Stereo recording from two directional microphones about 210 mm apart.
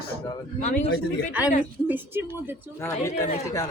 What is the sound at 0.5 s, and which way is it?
Speech, 35° left (ahead or behind).